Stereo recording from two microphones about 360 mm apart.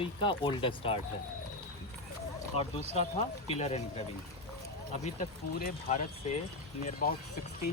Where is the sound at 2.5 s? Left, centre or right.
Centre.